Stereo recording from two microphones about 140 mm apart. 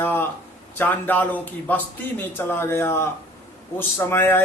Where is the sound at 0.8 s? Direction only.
15° left (ahead or behind).